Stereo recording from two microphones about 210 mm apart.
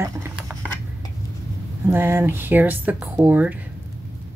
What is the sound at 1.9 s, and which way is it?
Speech, 10° right (ahead or behind).